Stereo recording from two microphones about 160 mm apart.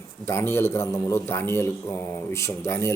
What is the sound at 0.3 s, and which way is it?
A man's voice, 15° left (ahead or behind).